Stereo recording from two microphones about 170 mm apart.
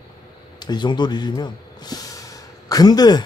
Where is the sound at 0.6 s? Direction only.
25° left (ahead or behind).